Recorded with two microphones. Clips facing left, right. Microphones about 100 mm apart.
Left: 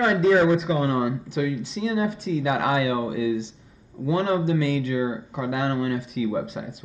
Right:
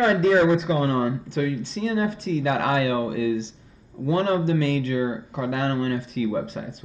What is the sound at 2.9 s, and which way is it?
Speech, 5° left (ahead or behind).